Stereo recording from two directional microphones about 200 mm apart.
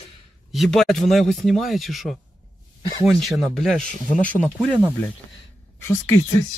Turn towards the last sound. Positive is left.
turn(degrees=15)  # may be behind; listen again after turning